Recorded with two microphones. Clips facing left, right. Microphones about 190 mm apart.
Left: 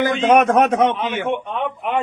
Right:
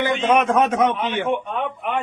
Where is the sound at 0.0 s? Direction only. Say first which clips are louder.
Left 4 dB; 40° left (ahead or behind).